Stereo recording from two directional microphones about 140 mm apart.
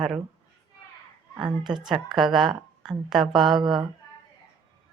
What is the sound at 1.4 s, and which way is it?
Speech, 30° right (ahead or behind).